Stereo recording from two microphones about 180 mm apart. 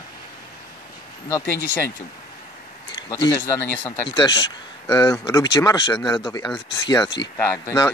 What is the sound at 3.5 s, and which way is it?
Speech, 15° left (ahead or behind).